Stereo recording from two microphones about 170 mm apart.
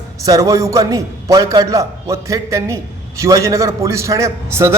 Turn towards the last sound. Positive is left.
turn(degrees=-20)  # may be behind; listen again after turning